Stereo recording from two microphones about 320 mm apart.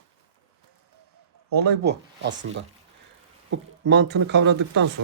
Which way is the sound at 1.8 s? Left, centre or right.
Right.